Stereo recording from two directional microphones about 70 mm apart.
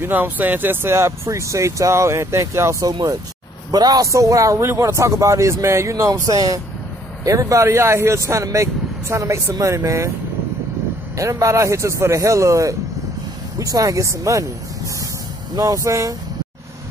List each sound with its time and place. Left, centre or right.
0.0 s speech: right
2.9 s speech: right
3.7 s speech: right
4.1 s speech: right
11.1 s speech: right
15.5 s speech: right